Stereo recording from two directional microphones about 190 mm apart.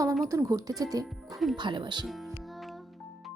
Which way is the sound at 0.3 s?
15° right (ahead or behind).